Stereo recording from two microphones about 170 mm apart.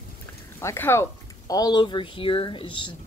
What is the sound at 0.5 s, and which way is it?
Speech, 15° left (ahead or behind).